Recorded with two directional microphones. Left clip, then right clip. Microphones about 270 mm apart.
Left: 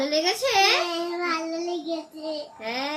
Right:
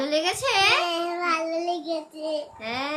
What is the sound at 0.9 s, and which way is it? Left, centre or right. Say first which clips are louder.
Child singing: right 2 dB; centre.